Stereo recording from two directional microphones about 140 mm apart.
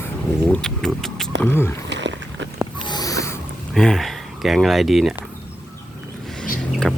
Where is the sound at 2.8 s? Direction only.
30° left (ahead or behind).